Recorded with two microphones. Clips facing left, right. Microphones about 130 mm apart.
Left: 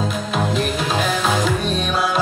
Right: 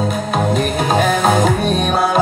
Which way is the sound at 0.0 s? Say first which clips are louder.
Right 4 dB; 50° right (ahead or behind).